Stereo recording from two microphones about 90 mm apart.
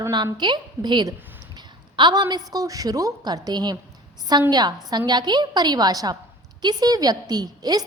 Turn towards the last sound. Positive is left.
turn(degrees=-45)  # may be behind; listen again after turning